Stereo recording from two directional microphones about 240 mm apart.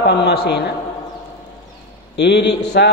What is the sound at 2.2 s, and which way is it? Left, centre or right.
Speech, left.